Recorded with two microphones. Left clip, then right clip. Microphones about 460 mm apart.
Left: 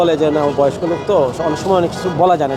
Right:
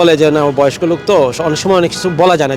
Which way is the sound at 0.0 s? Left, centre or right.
Right.